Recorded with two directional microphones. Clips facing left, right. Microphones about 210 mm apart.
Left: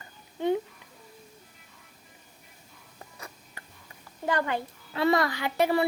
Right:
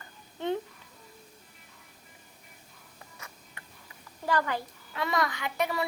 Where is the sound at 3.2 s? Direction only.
35° left (ahead or behind).